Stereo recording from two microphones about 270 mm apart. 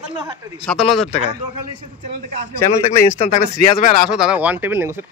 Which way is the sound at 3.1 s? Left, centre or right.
Left.